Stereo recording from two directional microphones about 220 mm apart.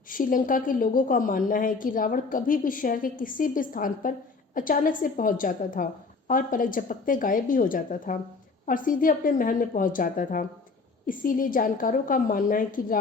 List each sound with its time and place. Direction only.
0.1 s a woman's voice: 40° left (ahead or behind)